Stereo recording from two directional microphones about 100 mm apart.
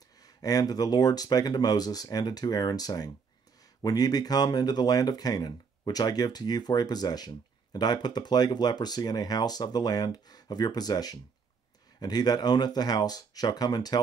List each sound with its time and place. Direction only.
0.2 s speech: 40° left (ahead or behind)